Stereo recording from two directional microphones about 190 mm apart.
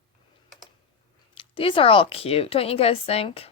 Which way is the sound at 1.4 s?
30° left (ahead or behind).